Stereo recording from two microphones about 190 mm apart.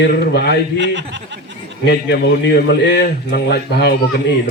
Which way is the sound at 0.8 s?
70° right (ahead or behind).